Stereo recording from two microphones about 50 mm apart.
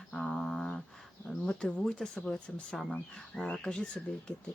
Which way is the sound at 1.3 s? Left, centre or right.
Centre.